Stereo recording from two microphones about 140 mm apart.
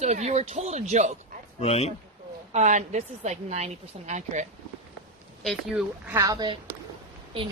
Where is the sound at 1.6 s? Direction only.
50° left (ahead or behind).